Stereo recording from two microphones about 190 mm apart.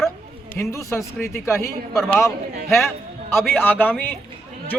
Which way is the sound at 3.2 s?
10° left (ahead or behind).